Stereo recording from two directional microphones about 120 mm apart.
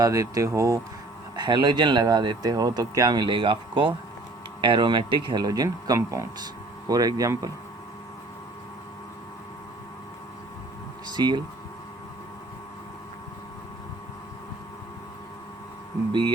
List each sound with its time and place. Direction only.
0.0 s speech: 30° right (ahead or behind)
1.4 s speech: 40° right (ahead or behind)
11.1 s speech: 35° right (ahead or behind)